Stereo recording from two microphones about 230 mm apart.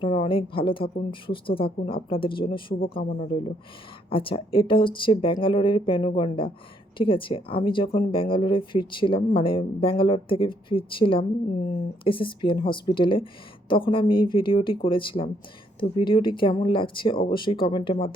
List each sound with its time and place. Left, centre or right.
0.0 s speech: left